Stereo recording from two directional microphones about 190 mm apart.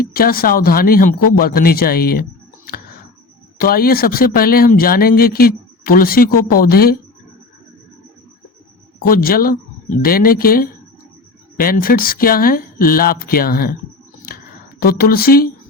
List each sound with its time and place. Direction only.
0.0 s speech: 50° left (ahead or behind)
3.6 s speech: 50° left (ahead or behind)
9.0 s speech: 50° left (ahead or behind)
14.8 s speech: 50° left (ahead or behind)